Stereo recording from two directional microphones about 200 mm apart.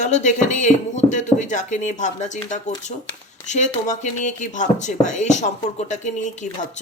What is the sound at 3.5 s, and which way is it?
Speech, 35° left (ahead or behind).